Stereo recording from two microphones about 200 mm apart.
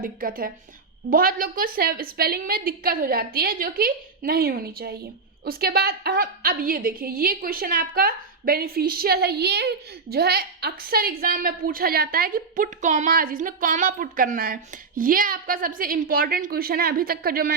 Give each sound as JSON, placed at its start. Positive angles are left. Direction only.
{"t": 0.0, "sound": "a woman's voice", "side_deg": -45}